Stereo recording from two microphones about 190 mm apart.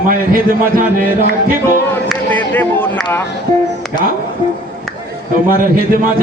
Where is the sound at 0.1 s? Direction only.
45° right (ahead or behind).